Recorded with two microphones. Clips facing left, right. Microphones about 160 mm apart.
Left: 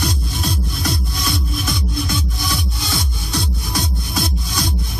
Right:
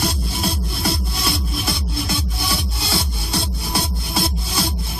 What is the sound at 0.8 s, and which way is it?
Music, 30° right (ahead or behind).